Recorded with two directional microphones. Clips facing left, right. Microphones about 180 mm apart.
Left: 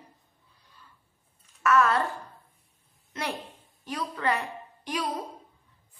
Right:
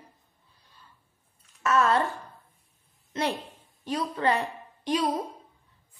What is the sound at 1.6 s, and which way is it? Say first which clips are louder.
Speech: even; 25° right (ahead or behind).